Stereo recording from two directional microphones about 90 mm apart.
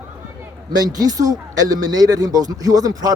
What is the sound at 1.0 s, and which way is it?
Speech, 45° right (ahead or behind).